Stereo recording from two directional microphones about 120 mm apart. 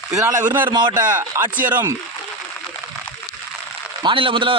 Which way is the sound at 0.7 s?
40° right (ahead or behind).